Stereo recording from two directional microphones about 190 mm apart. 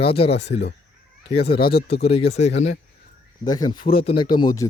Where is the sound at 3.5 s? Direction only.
20° left (ahead or behind).